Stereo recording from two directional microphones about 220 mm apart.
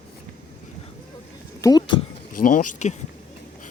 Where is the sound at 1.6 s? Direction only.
20° left (ahead or behind).